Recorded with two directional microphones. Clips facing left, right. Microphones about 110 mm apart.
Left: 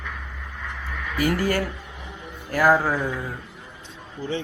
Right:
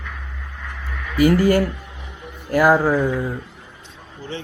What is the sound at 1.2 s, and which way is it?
A man's voice, 15° right (ahead or behind).